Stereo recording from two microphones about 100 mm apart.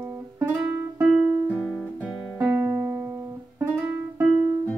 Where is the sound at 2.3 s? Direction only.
25° right (ahead or behind).